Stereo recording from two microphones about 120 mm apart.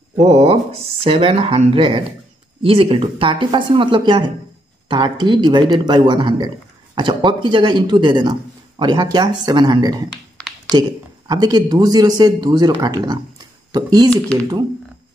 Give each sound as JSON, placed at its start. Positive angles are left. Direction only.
{"t": 0.2, "sound": "a man's voice", "side_deg": -60}